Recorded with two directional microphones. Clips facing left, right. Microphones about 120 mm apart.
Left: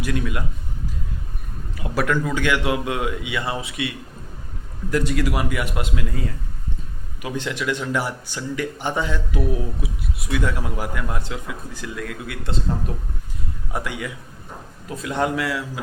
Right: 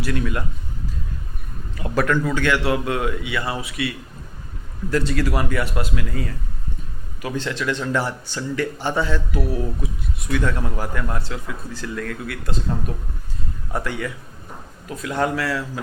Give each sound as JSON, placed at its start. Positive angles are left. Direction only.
{"t": 0.0, "sound": "a man's voice", "side_deg": 15}
{"t": 1.7, "sound": "a man's voice", "side_deg": 10}